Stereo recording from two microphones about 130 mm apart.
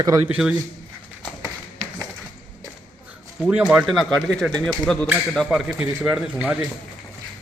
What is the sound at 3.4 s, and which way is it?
Speech, 5° right (ahead or behind).